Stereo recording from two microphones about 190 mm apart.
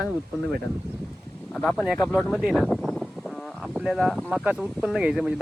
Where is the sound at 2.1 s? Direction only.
Centre (ahead or behind).